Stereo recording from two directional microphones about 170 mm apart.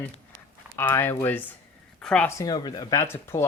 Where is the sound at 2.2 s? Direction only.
20° left (ahead or behind).